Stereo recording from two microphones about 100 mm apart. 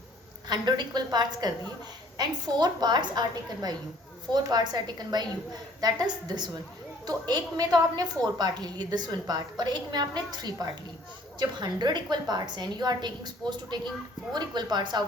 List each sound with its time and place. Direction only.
0.4 s a woman's voice: 45° right (ahead or behind)